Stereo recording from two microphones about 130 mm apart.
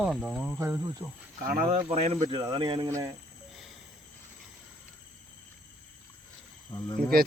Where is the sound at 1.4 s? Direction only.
90° right.